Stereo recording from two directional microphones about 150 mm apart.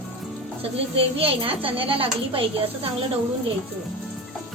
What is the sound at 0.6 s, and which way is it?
A woman's voice, 40° right (ahead or behind).